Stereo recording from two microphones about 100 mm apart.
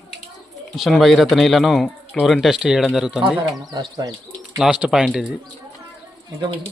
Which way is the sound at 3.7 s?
40° right (ahead or behind).